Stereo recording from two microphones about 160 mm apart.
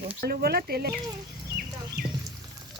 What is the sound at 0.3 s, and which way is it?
Speech, 75° right (ahead or behind).